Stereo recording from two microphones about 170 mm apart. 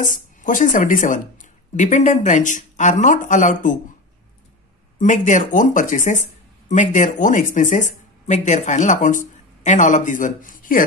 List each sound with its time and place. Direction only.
0.0 s speech: 50° left (ahead or behind)
4.9 s speech: 50° left (ahead or behind)